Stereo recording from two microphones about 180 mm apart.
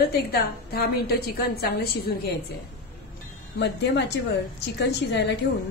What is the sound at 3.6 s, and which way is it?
A woman's voice, 70° left (ahead or behind).